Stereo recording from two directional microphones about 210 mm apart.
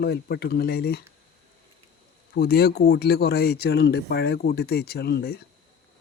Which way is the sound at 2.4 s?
45° left (ahead or behind).